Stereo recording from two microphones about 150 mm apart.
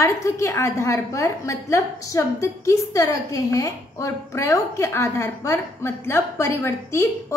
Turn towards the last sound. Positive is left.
turn(degrees=20)  # may be behind; listen again after turning